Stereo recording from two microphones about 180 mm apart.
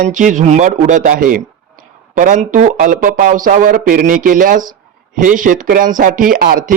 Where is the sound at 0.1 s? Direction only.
45° right (ahead or behind).